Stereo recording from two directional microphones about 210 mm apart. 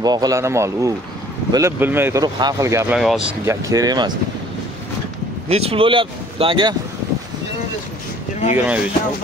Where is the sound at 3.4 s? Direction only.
15° right (ahead or behind).